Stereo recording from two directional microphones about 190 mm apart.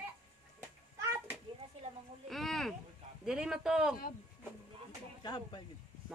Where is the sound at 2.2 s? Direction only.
Centre (ahead or behind).